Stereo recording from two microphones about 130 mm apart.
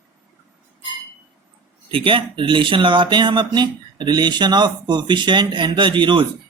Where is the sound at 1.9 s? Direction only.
40° right (ahead or behind).